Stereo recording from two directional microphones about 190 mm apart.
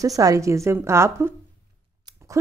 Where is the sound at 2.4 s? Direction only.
15° right (ahead or behind).